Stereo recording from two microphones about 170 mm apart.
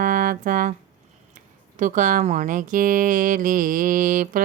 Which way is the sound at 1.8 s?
50° right (ahead or behind).